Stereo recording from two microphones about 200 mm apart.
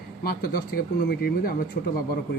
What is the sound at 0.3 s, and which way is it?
A man's voice, 45° left (ahead or behind).